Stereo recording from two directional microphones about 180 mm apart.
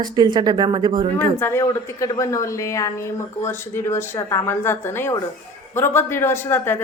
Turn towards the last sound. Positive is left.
turn(degrees=10)  # may be behind; listen again after turning